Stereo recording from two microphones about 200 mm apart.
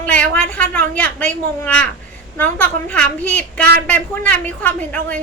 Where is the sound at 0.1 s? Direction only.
5° left (ahead or behind).